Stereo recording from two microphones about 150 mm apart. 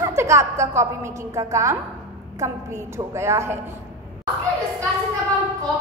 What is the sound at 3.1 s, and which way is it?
Speech, 20° right (ahead or behind).